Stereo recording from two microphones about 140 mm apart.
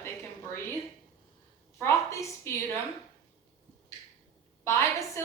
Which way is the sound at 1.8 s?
20° left (ahead or behind).